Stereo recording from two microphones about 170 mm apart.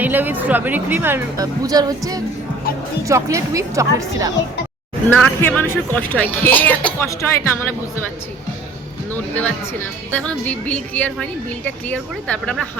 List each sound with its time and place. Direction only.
0.0 s a woman's voice: 10° right (ahead or behind)
5.0 s speech: 10° left (ahead or behind)
9.1 s speech: 10° left (ahead or behind)